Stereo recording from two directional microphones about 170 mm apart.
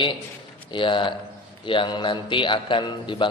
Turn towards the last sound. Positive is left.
turn(degrees=30)  # may be behind; listen again after turning